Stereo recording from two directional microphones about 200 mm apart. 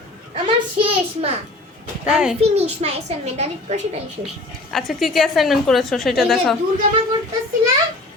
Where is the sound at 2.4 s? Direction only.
30° right (ahead or behind).